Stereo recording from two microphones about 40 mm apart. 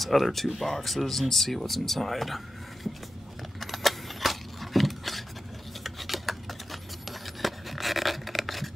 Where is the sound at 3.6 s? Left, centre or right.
Centre.